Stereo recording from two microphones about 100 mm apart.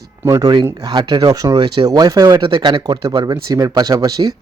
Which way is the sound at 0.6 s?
35° right (ahead or behind).